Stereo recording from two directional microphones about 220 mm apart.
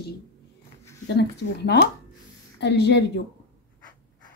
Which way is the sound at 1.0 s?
50° left (ahead or behind).